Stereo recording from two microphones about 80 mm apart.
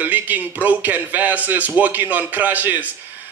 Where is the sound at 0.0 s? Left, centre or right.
Right.